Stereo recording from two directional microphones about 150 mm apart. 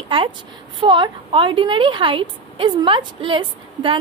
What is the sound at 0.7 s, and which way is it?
A woman's voice, 35° right (ahead or behind).